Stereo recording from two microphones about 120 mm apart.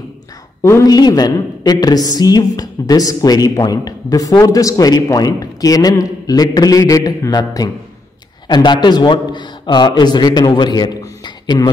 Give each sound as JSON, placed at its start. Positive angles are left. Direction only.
{"t": 0.6, "sound": "a woman's voice", "side_deg": 25}